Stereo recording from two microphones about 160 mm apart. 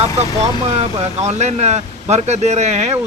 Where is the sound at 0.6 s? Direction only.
40° right (ahead or behind).